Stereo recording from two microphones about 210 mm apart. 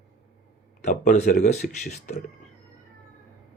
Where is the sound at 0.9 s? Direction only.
35° left (ahead or behind).